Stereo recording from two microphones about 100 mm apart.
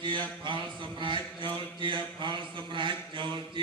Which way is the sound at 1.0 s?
55° right (ahead or behind).